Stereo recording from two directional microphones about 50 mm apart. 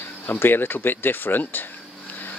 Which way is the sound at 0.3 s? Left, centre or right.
Left.